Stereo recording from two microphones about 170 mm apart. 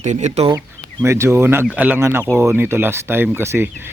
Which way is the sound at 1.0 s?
15° right (ahead or behind).